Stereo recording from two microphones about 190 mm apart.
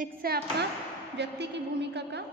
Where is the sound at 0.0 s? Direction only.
55° right (ahead or behind).